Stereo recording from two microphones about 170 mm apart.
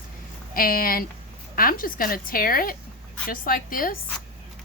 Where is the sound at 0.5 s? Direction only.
60° left (ahead or behind).